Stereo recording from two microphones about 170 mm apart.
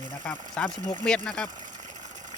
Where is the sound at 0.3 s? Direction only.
5° left (ahead or behind).